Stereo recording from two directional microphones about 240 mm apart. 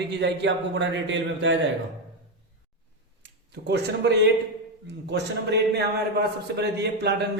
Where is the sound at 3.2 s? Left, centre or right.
Right.